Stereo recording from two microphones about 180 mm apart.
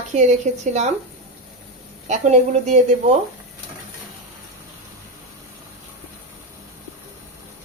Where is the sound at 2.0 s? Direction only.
40° right (ahead or behind).